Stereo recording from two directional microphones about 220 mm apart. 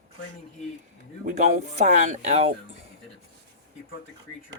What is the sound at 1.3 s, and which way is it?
Speech, 30° right (ahead or behind).